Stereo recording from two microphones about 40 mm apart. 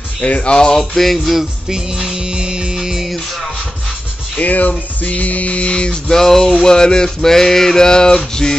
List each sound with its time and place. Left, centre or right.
0.2 s speech: left
0.9 s music: centre
2.0 s music: centre
4.4 s music: left
6.0 s mantra: centre